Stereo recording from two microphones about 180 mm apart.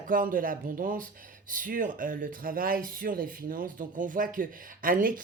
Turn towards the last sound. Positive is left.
turn(degrees=-50)  # may be behind; listen again after turning